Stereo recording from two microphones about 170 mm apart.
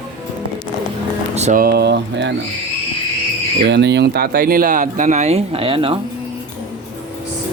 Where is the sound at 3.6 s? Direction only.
90° right; by 6.0 s 30° right (ahead or behind).